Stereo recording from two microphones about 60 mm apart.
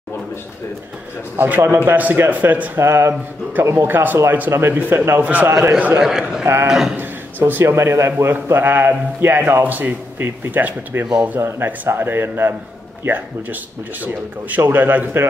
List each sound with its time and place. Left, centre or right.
1.3 s a man's voice: right
2.8 s a man's voice: right
4.7 s a man's voice: right
5.5 s speech: right
5.9 s a man's voice: centre
6.4 s speech: right
7.0 s a sound: right
7.6 s a man's voice: right
11.3 s a man's voice: right
14.6 s a man's voice: right